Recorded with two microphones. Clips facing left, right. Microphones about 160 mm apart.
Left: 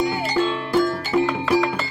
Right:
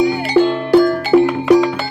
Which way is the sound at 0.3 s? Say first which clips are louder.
Right 10 dB; 75° right (ahead or behind).